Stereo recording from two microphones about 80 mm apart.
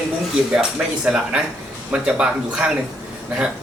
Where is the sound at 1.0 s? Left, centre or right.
Centre.